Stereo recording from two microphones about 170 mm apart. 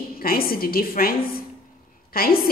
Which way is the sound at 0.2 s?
60° left (ahead or behind).